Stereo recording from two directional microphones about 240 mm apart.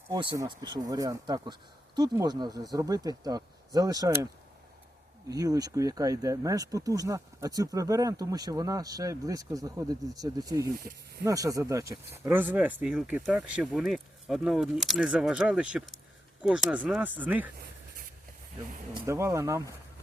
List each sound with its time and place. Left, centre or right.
0.1 s speech: centre
5.3 s speech: centre
17.6 s a sound: right
19.0 s speech: centre